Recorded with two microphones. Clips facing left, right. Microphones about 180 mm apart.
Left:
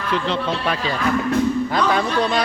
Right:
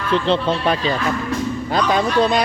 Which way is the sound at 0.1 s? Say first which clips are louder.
Right 4 dB; 30° right (ahead or behind).